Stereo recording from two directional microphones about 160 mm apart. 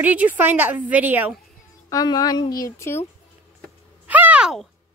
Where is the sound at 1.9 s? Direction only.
25° left (ahead or behind).